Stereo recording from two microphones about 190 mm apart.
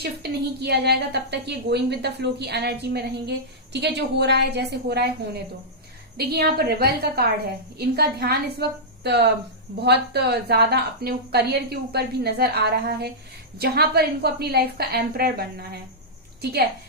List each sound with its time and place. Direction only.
0.0 s a woman's voice: 60° right (ahead or behind)